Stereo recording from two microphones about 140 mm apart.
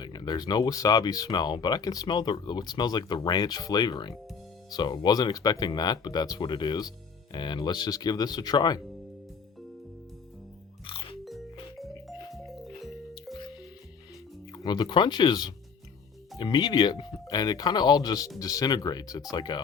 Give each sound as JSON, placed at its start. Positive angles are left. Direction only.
{"t": 0.0, "sound": "speech", "side_deg": 30}
{"t": 10.8, "sound": "music", "side_deg": 40}
{"t": 11.8, "sound": "music", "side_deg": 0}
{"t": 14.5, "sound": "speech", "side_deg": 30}